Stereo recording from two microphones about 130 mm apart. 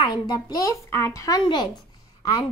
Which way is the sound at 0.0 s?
30° left (ahead or behind).